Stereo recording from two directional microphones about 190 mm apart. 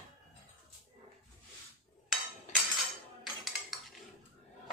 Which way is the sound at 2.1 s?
Centre (ahead or behind).